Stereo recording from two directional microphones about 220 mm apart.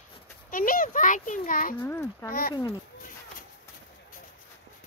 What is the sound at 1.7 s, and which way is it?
A child's voice, 10° left (ahead or behind).